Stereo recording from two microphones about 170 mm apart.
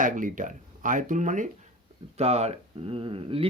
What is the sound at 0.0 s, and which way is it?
Speech, 50° right (ahead or behind).